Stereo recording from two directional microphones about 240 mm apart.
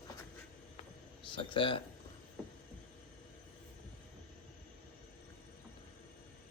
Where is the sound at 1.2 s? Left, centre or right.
Left.